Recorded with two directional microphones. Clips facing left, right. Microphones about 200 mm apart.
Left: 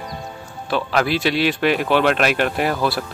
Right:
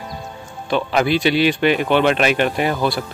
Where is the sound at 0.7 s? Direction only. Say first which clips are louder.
Right 2 dB; centre (ahead or behind).